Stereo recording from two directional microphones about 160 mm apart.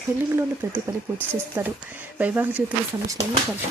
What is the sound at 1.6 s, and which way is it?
Stir, 15° right (ahead or behind).